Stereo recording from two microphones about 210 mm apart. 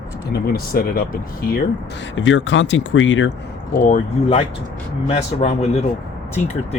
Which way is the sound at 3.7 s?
35° left (ahead or behind).